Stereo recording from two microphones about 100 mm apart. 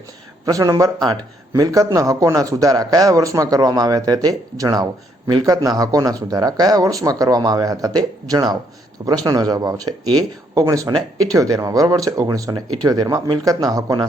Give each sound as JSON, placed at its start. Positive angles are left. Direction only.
{"t": 0.4, "sound": "speech", "side_deg": -35}